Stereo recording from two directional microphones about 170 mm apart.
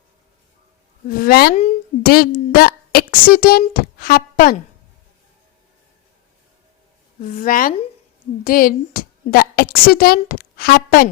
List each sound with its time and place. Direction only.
1.0 s a woman's voice: 55° left (ahead or behind)
7.2 s a woman's voice: 50° left (ahead or behind)